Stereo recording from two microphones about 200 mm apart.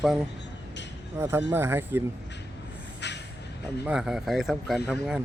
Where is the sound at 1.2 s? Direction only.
15° right (ahead or behind).